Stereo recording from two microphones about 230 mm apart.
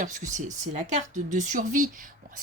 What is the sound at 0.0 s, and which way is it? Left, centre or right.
Speech, right.